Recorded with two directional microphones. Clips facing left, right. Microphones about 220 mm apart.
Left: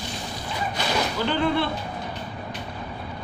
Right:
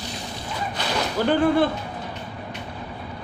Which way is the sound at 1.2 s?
45° right (ahead or behind).